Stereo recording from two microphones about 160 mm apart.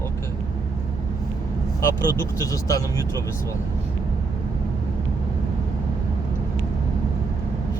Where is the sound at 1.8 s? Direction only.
20° left (ahead or behind).